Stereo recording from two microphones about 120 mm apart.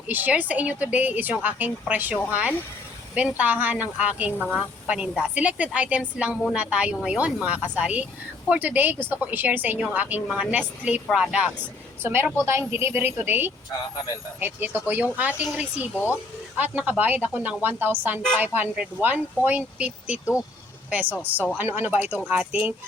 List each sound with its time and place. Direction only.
0.1 s speech: 15° right (ahead or behind)
3.2 s speech: 15° right (ahead or behind)
10.2 s speech: centre (ahead or behind)
12.0 s a woman's voice: 20° right (ahead or behind)